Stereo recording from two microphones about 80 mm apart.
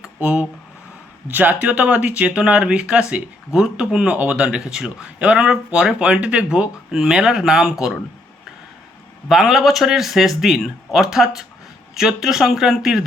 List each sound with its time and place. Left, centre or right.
0.2 s speech: centre
9.3 s speech: centre